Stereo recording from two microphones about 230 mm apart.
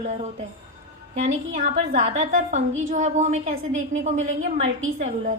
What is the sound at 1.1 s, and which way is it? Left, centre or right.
A woman's voice, right.